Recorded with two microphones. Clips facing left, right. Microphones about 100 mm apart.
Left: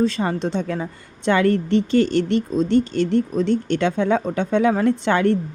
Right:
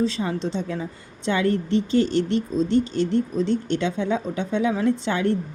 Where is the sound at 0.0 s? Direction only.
55° left (ahead or behind).